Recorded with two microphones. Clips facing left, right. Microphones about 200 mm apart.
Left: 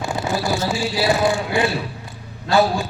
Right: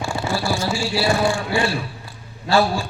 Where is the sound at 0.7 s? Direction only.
20° left (ahead or behind).